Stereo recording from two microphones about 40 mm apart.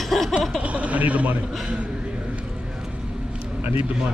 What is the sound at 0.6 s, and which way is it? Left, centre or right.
Speech, right.